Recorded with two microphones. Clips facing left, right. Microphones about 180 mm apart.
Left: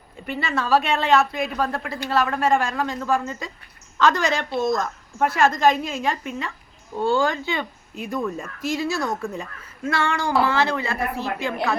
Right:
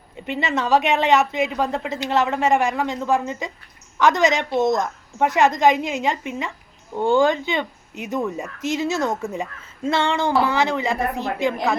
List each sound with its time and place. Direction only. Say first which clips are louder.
0.3 s speech: right 2 dB; 20° right (ahead or behind)